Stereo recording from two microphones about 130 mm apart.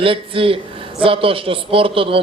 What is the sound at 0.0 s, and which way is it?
A man's voice, 45° right (ahead or behind).